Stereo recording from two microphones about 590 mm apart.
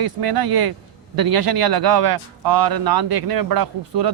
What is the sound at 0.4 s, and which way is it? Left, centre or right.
Speech, right.